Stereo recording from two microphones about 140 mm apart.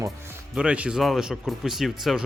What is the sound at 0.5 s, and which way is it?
Speech, 10° right (ahead or behind).